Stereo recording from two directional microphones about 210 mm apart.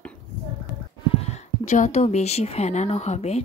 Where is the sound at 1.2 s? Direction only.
30° left (ahead or behind).